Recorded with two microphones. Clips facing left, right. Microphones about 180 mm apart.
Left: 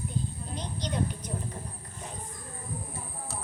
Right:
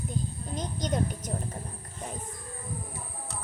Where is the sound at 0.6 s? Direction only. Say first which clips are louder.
Right 2 dB; 45° right (ahead or behind).